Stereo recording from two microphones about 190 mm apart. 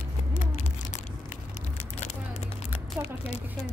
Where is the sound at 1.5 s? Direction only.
35° left (ahead or behind).